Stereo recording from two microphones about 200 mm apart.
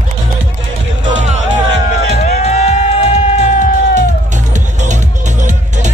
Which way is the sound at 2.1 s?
35° left (ahead or behind).